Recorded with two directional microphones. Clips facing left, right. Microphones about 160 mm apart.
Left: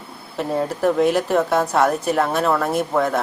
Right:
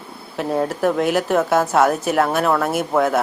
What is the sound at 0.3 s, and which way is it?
A woman's voice, centre (ahead or behind).